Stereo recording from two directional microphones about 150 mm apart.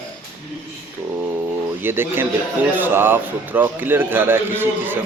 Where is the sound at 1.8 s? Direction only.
15° right (ahead or behind).